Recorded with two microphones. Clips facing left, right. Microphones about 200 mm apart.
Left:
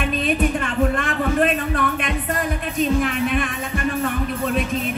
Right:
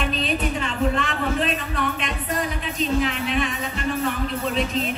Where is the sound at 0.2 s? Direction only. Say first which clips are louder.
Left 4 dB; 50° left (ahead or behind).